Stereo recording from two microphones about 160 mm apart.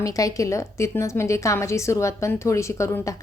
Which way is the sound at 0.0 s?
20° left (ahead or behind).